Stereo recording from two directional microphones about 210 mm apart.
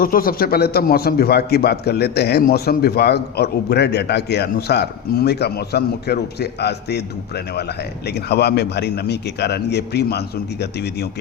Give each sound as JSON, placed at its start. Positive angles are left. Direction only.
{"t": 0.0, "sound": "a man's voice", "side_deg": 45}